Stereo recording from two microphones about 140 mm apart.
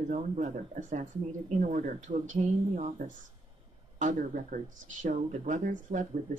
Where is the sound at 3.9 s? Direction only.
65° right (ahead or behind).